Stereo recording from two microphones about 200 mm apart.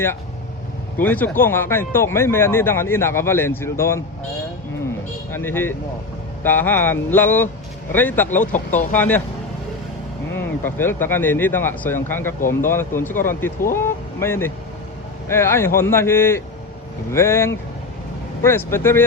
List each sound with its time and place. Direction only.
0.9 s speech: 10° left (ahead or behind)
5.3 s speech: 10° left (ahead or behind)
8.4 s speech: 40° left (ahead or behind)
8.9 s speech: 10° left (ahead or behind)
10.3 s speech: 10° left (ahead or behind)